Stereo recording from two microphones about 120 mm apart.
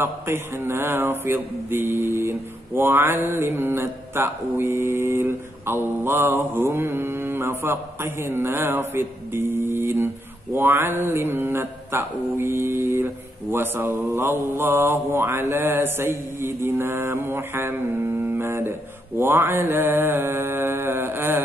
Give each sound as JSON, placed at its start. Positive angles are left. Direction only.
{"t": 0.0, "sound": "mantra", "side_deg": -20}